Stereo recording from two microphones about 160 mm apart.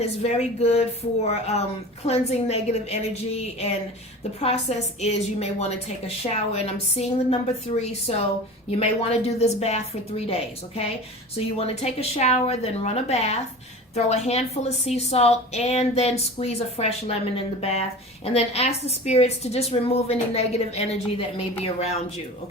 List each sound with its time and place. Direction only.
0.2 s a woman's voice: 40° left (ahead or behind)